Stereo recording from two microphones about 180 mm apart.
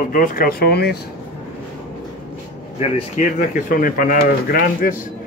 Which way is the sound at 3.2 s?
45° left (ahead or behind).